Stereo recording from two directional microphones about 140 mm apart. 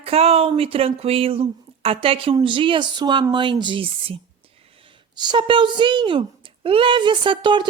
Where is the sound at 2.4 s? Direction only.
35° right (ahead or behind).